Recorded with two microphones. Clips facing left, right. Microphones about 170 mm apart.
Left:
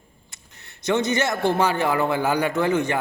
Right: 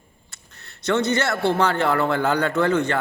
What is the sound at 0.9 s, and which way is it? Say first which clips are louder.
A man's voice: right 1 dB; 15° left (ahead or behind).